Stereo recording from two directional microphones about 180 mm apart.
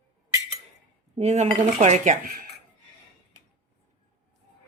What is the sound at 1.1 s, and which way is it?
Speech, 40° right (ahead or behind).